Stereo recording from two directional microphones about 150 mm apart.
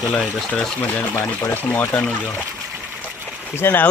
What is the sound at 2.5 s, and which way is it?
Water, 15° right (ahead or behind).